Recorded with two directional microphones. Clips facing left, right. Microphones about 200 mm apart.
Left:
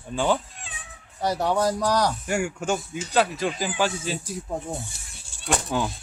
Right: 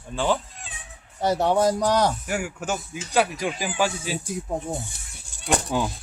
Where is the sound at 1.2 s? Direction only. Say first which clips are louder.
Right 3 dB; 25° right (ahead or behind).